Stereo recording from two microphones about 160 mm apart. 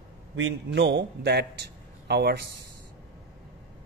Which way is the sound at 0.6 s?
90° right.